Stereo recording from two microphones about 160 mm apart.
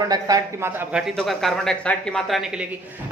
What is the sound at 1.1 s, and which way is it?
Speech, 5° left (ahead or behind).